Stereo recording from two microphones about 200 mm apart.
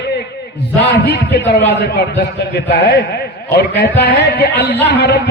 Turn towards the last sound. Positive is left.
turn(degrees=55)  # may be behind; listen again after turning